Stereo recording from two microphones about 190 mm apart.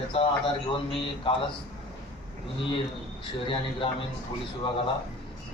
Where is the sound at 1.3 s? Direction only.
25° left (ahead or behind).